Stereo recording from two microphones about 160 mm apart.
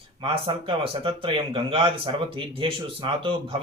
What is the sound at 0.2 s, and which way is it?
Speech, 35° right (ahead or behind).